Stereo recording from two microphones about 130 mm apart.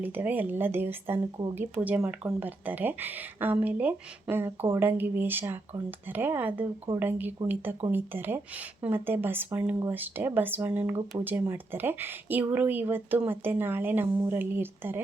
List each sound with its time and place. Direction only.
0.0 s speech: 15° right (ahead or behind)